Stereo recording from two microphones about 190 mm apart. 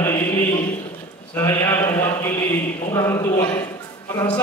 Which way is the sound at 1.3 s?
15° left (ahead or behind).